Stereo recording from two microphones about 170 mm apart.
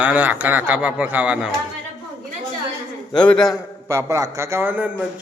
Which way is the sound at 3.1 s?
5° left (ahead or behind).